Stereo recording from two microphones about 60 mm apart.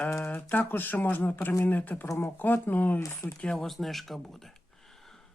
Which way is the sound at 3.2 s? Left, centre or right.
Left.